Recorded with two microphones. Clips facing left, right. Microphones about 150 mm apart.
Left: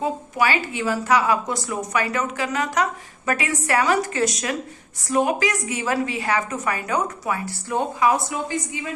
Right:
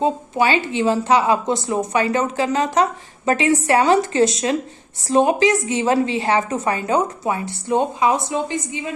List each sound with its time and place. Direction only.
0.0 s speech: 25° right (ahead or behind)